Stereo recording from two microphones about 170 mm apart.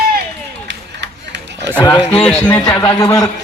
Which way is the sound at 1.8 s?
25° left (ahead or behind).